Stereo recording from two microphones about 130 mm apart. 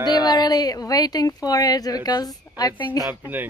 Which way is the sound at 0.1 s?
30° left (ahead or behind).